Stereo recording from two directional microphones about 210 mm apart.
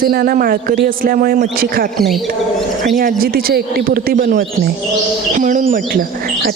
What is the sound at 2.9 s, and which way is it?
A woman's voice, 45° right (ahead or behind).